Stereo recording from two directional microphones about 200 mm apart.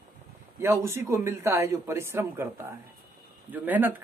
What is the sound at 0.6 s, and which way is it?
A man's voice, 15° right (ahead or behind).